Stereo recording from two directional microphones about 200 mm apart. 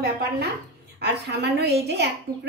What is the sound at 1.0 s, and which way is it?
A woman's voice, 55° right (ahead or behind).